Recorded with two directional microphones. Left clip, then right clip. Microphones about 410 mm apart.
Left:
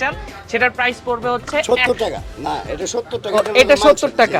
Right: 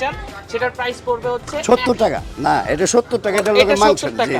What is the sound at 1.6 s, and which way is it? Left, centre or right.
Speech, right.